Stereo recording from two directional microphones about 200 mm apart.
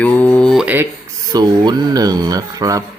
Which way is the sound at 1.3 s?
20° right (ahead or behind).